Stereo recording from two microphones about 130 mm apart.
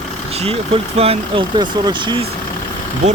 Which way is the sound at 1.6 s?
35° right (ahead or behind).